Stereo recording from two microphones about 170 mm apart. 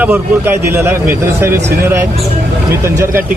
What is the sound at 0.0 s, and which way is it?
Speech, 10° right (ahead or behind).